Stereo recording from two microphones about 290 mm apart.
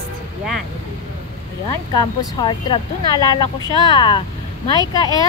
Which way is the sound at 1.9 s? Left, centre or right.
Centre.